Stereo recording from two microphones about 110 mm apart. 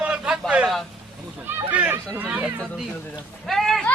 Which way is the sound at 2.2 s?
15° right (ahead or behind).